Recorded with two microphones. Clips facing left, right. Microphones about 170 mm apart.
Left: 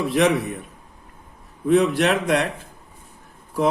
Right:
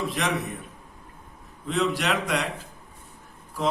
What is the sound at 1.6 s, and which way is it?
Speech, 55° left (ahead or behind).